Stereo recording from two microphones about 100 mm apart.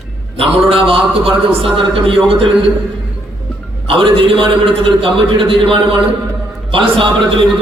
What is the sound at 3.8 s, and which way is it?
A man's voice, 65° right (ahead or behind).